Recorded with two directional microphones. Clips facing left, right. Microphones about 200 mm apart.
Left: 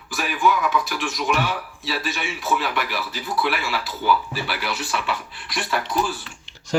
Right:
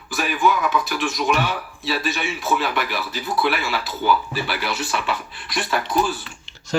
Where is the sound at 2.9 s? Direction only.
25° right (ahead or behind).